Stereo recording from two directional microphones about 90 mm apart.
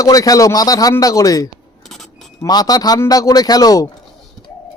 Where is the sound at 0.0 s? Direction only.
40° left (ahead or behind).